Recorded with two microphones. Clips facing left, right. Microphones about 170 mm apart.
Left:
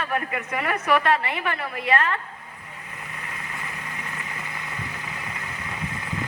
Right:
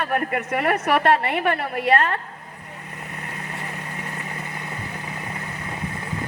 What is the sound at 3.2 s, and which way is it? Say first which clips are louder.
Vehicle: right 4 dB; 40° right (ahead or behind).